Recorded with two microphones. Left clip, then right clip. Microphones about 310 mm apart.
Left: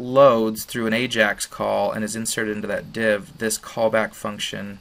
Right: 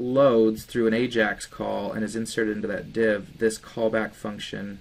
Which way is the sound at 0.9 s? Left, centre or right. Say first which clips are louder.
Left 3 dB; left.